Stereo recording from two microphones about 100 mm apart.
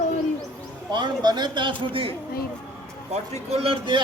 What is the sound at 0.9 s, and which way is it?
A man's voice, 45° right (ahead or behind).